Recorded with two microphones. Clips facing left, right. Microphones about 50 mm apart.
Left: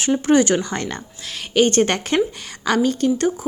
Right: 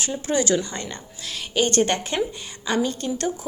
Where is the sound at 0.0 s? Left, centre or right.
Left.